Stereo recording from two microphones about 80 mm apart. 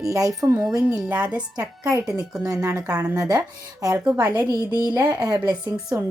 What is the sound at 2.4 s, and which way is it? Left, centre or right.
A woman's voice, right.